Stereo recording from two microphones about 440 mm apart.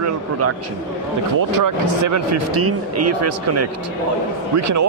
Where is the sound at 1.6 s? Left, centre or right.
Right.